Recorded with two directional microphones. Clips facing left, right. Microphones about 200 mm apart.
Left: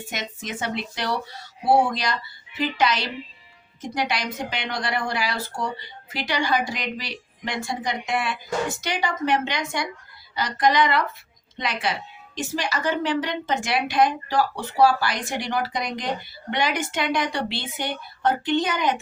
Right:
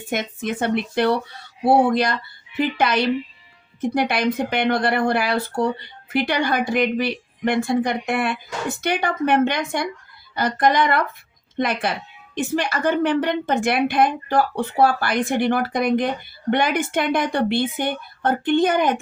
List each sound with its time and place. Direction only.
0.0 s a woman's voice: 55° right (ahead or behind)